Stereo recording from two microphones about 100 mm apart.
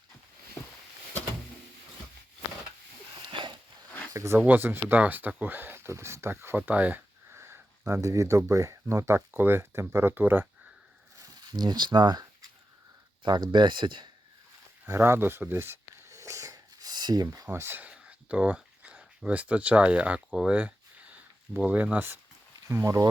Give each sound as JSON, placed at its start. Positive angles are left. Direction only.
{"t": 3.2, "sound": "a sound", "side_deg": -50}
{"t": 4.1, "sound": "speech", "side_deg": -30}
{"t": 4.4, "sound": "speech", "side_deg": -20}
{"t": 11.2, "sound": "speech", "side_deg": -45}
{"t": 13.2, "sound": "speech", "side_deg": -50}
{"t": 14.8, "sound": "snort", "side_deg": -25}
{"t": 22.7, "sound": "speech", "side_deg": -30}